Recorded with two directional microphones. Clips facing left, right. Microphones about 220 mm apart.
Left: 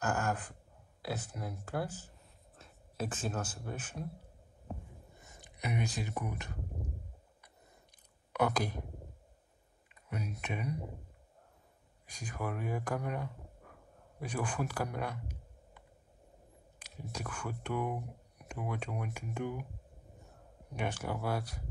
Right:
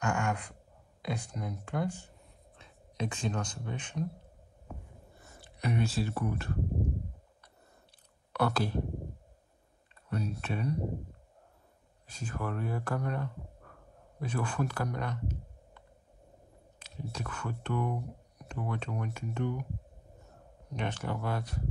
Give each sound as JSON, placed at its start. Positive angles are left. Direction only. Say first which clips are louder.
{"t": 0.0, "sound": "gasp", "louder": "right 2 dB", "side_deg": 5}
{"t": 1.0, "sound": "speech", "louder": "right 3 dB", "side_deg": 5}
{"t": 4.6, "sound": "a sound", "louder": "left 2 dB", "side_deg": 20}
{"t": 8.3, "sound": "speech", "louder": "right 2 dB", "side_deg": 15}
{"t": 9.9, "sound": "speech", "louder": "right 6 dB", "side_deg": 15}
{"t": 12.1, "sound": "speech", "louder": "right 2 dB", "side_deg": 15}
{"t": 16.9, "sound": "speech", "louder": "right 2 dB", "side_deg": 10}
{"t": 20.7, "sound": "speech", "louder": "right 1 dB", "side_deg": 10}